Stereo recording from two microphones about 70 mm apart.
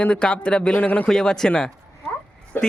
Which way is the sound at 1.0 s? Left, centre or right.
Centre.